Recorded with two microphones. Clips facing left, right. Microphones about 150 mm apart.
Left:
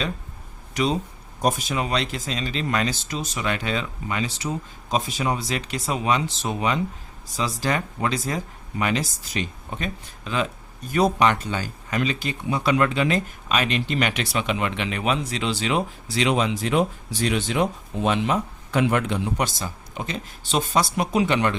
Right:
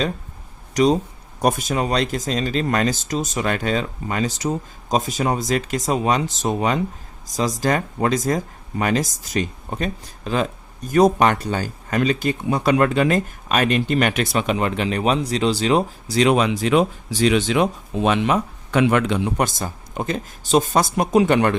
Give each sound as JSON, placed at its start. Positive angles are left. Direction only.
{"t": 0.7, "sound": "speech", "side_deg": -40}
{"t": 1.4, "sound": "speech", "side_deg": -55}
{"t": 16.3, "sound": "speech", "side_deg": -65}
{"t": 19.4, "sound": "speech", "side_deg": -50}